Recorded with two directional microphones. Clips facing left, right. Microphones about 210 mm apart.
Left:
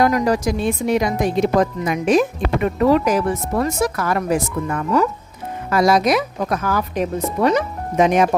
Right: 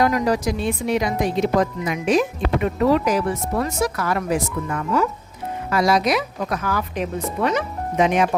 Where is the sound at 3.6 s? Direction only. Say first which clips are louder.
Left 3 dB; 45° left (ahead or behind).